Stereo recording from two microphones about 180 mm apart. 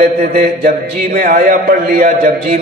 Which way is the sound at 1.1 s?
50° right (ahead or behind).